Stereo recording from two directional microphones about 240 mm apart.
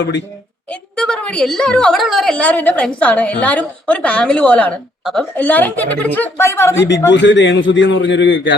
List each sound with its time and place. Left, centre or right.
0.0 s a man's voice: left
0.7 s a woman's voice: centre
6.7 s a man's voice: left